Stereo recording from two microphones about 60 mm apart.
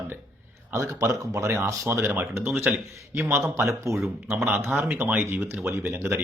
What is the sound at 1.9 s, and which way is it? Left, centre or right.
Speech, right.